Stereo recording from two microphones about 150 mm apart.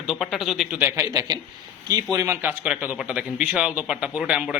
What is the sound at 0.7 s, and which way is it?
A man's voice, 15° right (ahead or behind).